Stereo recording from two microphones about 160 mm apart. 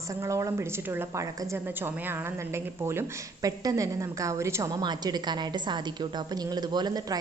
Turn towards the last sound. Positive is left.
turn(degrees=-25)  # may be behind; listen again after turning